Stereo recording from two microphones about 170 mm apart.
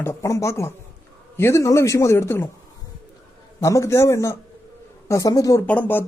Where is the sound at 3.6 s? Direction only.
20° left (ahead or behind).